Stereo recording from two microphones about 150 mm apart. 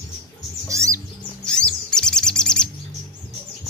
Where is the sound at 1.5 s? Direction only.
5° left (ahead or behind).